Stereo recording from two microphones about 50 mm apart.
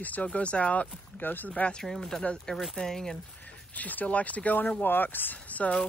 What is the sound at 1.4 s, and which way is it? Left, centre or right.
Speech, left.